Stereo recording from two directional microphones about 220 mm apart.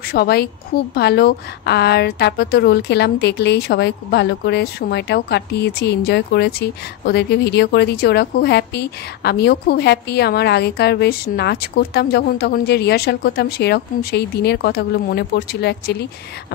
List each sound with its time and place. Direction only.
0.1 s a woman's voice: 45° left (ahead or behind)